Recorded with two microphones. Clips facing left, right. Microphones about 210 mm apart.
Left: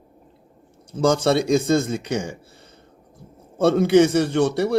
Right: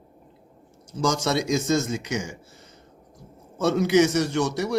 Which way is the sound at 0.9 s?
55° left (ahead or behind).